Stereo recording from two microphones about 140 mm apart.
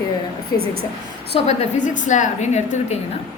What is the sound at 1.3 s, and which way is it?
A woman's voice, 50° left (ahead or behind).